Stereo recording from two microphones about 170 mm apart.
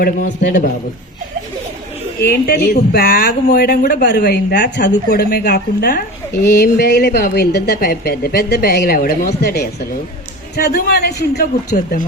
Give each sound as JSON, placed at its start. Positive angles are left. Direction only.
{"t": 0.0, "sound": "a man's voice", "side_deg": 55}
{"t": 2.2, "sound": "a man's voice", "side_deg": 65}